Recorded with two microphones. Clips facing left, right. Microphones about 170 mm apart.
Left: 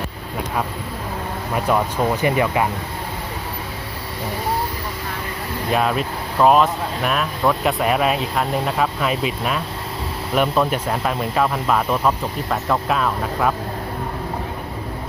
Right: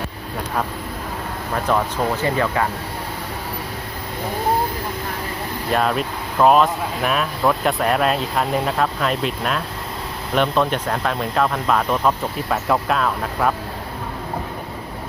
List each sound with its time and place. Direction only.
1.5 s speech: 10° left (ahead or behind)
5.7 s speech: centre (ahead or behind)